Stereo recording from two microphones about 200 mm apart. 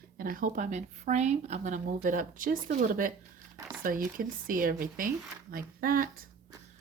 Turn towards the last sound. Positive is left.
turn(degrees=-45)  # may be behind; listen again after turning